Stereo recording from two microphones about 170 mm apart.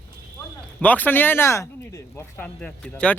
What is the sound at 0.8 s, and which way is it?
Speech, 10° left (ahead or behind).